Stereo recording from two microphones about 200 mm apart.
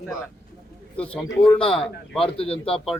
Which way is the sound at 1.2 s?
10° left (ahead or behind).